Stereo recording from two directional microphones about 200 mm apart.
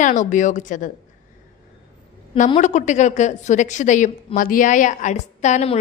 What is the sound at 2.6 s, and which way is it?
A woman's voice, 35° left (ahead or behind).